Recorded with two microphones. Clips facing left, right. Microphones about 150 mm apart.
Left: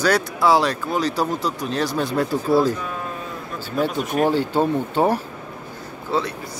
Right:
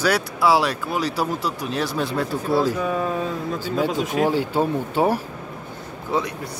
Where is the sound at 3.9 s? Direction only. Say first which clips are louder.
Right 1 dB; 90° right.